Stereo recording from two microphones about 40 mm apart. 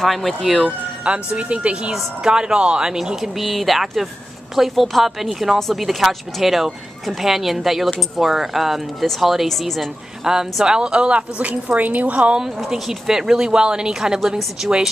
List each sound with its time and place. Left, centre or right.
0.0 s speech: centre
1.0 s speech: right; by 3.4 s centre
3.4 s speech: centre
10.2 s a woman's voice: centre; by 12.4 s right
12.4 s speech: centre